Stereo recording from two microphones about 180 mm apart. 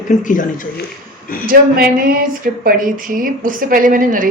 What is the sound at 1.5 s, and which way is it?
Speech, 55° right (ahead or behind).